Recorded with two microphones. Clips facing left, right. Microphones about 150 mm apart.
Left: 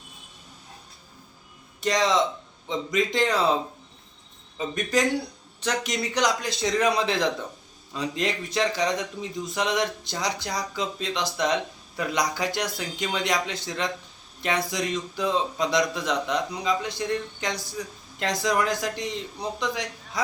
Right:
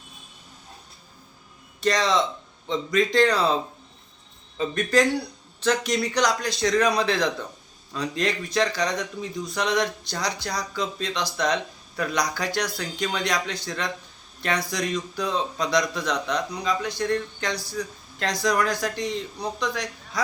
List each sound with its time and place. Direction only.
1.8 s a man's voice: 15° left (ahead or behind)
4.5 s a man's voice: 15° left (ahead or behind)